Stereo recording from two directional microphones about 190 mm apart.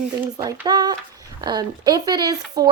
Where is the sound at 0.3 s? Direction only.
20° right (ahead or behind).